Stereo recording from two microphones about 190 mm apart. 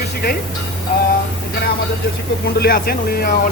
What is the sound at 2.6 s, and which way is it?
Speech, 50° left (ahead or behind).